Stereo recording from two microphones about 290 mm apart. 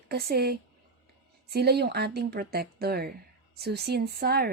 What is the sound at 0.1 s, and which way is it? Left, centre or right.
A woman's voice, right.